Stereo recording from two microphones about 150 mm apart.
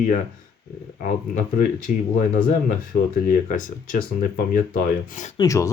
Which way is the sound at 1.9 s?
60° left (ahead or behind).